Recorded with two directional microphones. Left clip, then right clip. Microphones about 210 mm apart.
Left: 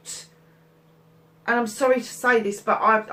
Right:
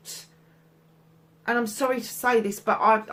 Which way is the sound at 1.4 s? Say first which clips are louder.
Left 4 dB; 45° right (ahead or behind).